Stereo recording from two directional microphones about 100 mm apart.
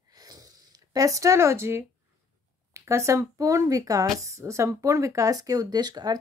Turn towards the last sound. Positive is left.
turn(degrees=-40)  # may be behind; listen again after turning